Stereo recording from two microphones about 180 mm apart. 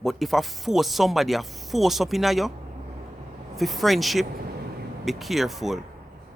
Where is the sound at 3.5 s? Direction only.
Centre (ahead or behind).